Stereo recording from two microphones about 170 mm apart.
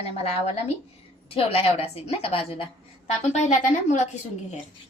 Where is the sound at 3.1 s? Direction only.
45° left (ahead or behind).